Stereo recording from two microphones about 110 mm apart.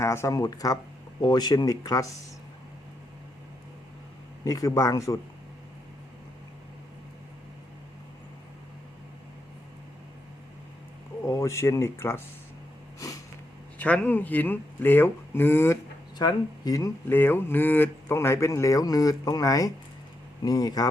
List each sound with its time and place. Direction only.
0.0 s speech: 25° left (ahead or behind)
4.4 s speech: 30° left (ahead or behind)
11.3 s speech: 30° left (ahead or behind)
13.7 s speech: 15° left (ahead or behind)
16.1 s speech: 35° left (ahead or behind)
17.1 s speech: 20° left (ahead or behind); by 20.8 s 35° left (ahead or behind)